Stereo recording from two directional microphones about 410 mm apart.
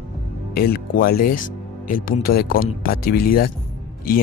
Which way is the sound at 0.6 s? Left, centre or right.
Left.